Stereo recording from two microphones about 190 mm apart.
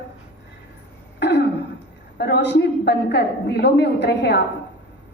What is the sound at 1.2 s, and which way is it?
Throat clearing, 65° left (ahead or behind).